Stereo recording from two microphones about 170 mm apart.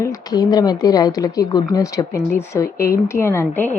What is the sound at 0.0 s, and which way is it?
Speech, 20° left (ahead or behind).